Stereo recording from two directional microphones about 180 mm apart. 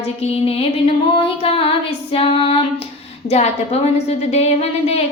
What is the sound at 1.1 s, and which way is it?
Female singing, 30° left (ahead or behind).